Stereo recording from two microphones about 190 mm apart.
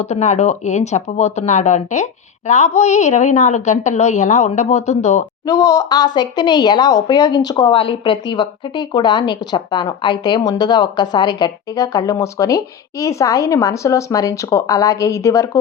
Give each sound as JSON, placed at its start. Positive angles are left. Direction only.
{"t": 0.0, "sound": "a woman's voice", "side_deg": 35}
{"t": 5.5, "sound": "a woman's voice", "side_deg": 20}